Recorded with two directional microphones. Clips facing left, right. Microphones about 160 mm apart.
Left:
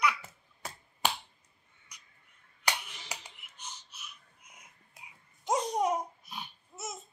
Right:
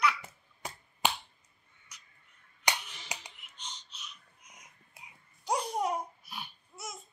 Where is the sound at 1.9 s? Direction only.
15° left (ahead or behind).